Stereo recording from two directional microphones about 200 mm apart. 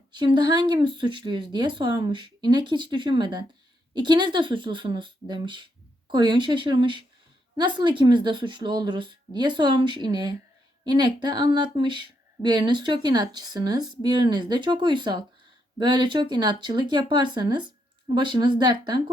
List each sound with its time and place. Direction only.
0.2 s speech: 20° right (ahead or behind)